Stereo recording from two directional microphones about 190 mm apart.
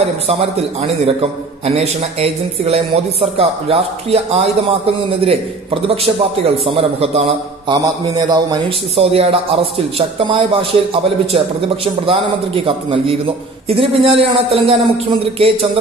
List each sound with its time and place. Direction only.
0.0 s a man's voice: 30° right (ahead or behind)